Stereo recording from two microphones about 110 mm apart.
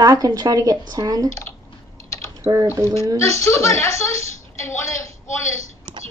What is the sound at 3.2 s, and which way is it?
A woman's voice, 25° left (ahead or behind).